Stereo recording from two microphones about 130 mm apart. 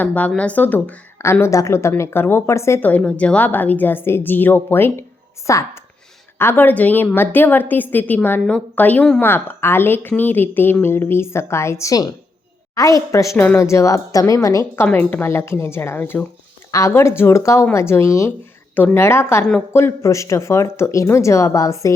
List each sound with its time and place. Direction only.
0.0 s speech: 10° left (ahead or behind)
14.8 s speech: 10° left (ahead or behind)